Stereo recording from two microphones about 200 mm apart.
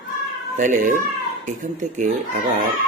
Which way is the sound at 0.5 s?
40° right (ahead or behind).